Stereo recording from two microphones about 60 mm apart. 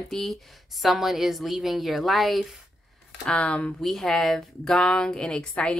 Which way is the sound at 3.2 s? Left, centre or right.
Centre.